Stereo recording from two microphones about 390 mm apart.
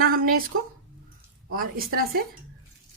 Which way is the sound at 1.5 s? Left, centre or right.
Right.